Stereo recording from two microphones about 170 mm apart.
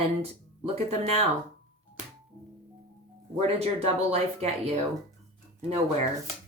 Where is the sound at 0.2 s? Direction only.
35° right (ahead or behind).